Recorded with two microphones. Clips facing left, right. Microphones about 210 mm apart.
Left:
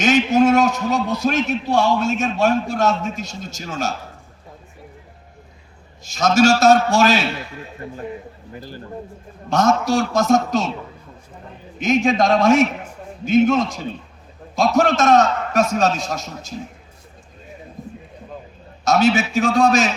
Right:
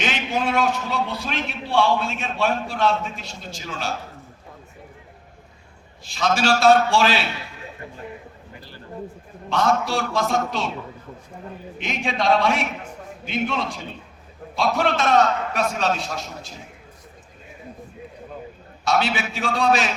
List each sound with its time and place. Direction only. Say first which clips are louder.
0.0 s a man's voice: left 10 dB; 45° left (ahead or behind)
6.1 s a man's voice: left 6 dB; 45° left (ahead or behind)
9.5 s a man's voice: left 4 dB; 45° left (ahead or behind)
11.8 s a man's voice: left 9 dB; 45° left (ahead or behind)
18.9 s a man's voice: left 6 dB; 45° left (ahead or behind)